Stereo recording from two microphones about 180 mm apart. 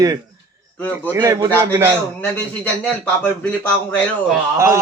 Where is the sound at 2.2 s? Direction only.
10° left (ahead or behind).